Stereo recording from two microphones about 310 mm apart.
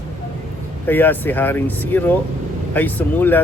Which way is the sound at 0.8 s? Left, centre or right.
Centre.